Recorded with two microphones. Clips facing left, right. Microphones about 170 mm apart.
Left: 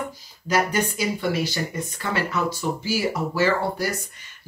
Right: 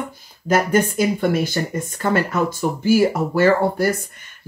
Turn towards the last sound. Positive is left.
turn(degrees=-55)  # may be behind; listen again after turning